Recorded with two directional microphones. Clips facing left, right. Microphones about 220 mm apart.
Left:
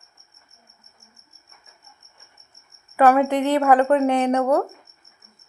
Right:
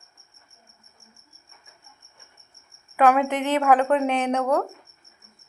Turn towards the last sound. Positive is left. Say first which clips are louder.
# left 4 dB
turn(degrees=10)  # may be behind; listen again after turning